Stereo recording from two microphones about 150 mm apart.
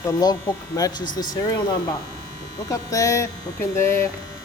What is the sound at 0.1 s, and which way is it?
Speech, 25° left (ahead or behind).